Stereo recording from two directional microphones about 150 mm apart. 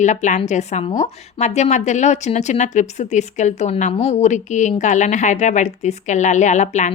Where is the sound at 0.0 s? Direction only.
55° left (ahead or behind).